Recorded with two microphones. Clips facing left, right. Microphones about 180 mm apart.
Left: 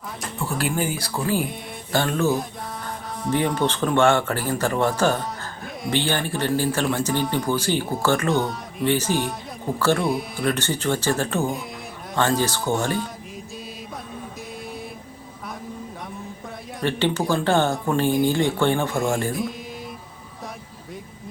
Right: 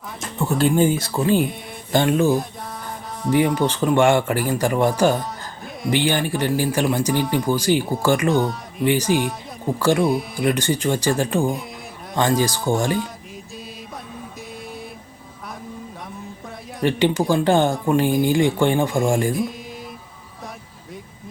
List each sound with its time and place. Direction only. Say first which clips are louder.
0.2 s music: right 5 dB; 20° right (ahead or behind)
0.6 s speech: right 9 dB; 25° right (ahead or behind)
3.4 s speech: even; centre (ahead or behind)
3.9 s speech: right 2 dB; 10° right (ahead or behind)
8.3 s speech: right 3 dB; centre (ahead or behind)
8.8 s speech: right 3 dB; 10° right (ahead or behind)
10.0 s speech: right 4 dB; centre (ahead or behind)
10.4 s speech: right 3 dB; 15° right (ahead or behind)
16.8 s speech: right 4 dB; 15° right (ahead or behind)
19.3 s speech: right 3 dB; centre (ahead or behind)